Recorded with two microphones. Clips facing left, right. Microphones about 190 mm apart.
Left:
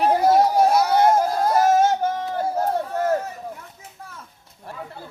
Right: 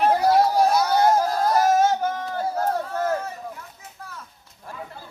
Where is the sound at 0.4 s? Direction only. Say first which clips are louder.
Left 2 dB; 25° left (ahead or behind).